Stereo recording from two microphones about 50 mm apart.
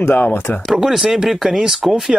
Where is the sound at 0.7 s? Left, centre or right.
Centre.